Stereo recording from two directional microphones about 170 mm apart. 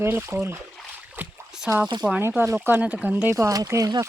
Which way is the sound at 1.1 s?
5° right (ahead or behind).